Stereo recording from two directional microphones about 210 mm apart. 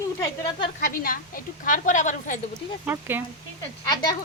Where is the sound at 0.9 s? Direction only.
40° left (ahead or behind).